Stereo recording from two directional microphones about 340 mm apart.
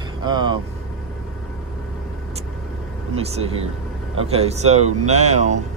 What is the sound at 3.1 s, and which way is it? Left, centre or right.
Speech, centre.